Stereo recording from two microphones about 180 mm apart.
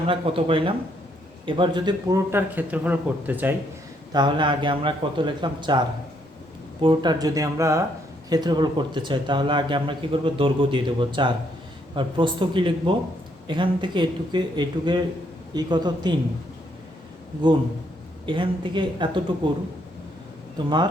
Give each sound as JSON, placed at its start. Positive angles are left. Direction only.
{"t": 0.1, "sound": "speech", "side_deg": -30}
{"t": 4.1, "sound": "speech", "side_deg": -25}
{"t": 6.8, "sound": "speech", "side_deg": -25}
{"t": 18.3, "sound": "speech", "side_deg": -25}